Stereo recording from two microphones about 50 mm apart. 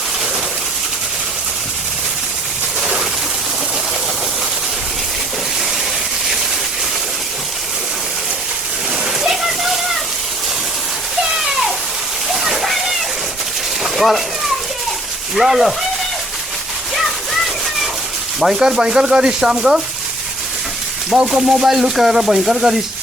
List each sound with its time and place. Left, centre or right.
9.2 s rain: centre
11.3 s a sound: centre
12.3 s water: centre
13.8 s a sound: centre
15.4 s speech: centre
18.3 s speech: centre
21.1 s speech: centre
21.7 s speech: centre